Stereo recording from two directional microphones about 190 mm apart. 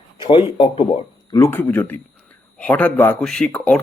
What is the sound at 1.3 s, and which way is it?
A man's voice, 10° left (ahead or behind).